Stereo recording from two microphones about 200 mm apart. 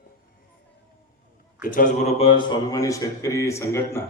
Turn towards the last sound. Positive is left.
turn(degrees=15)  # may be behind; listen again after turning